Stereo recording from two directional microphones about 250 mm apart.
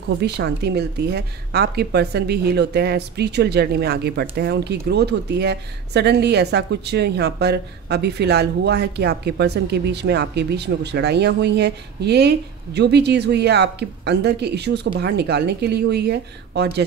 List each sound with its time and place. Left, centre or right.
0.2 s speech: right